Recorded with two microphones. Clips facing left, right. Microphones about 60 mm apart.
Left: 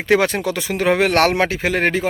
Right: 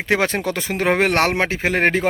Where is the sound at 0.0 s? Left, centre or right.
Right.